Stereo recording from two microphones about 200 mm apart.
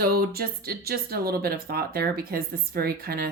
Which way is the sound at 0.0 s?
50° right (ahead or behind).